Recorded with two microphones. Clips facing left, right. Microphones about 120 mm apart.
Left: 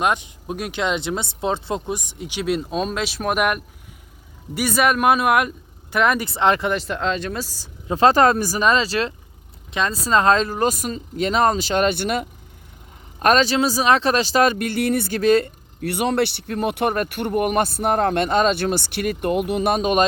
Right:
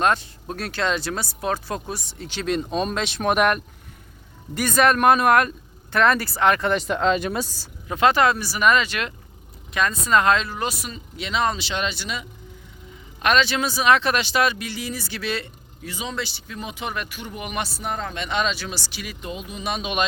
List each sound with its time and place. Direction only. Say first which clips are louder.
0.0 s speech: even; 15° left (ahead or behind)
6.7 s speech: right 2 dB; centre (ahead or behind)
7.4 s speech: even; 15° left (ahead or behind)
7.9 s speech: left 4 dB; 35° left (ahead or behind)
8.6 s speech: even; 30° left (ahead or behind); by 12.3 s 55° left (ahead or behind)
13.1 s speech: left 4 dB; 40° left (ahead or behind)
15.8 s speech: left 10 dB; 65° left (ahead or behind); by 20.1 s 45° left (ahead or behind)